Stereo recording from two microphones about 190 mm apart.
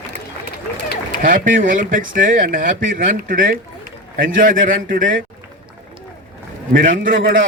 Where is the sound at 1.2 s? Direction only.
45° right (ahead or behind).